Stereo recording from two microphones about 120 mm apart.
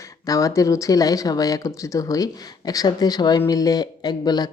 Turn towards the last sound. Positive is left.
turn(degrees=35)  # may be behind; listen again after turning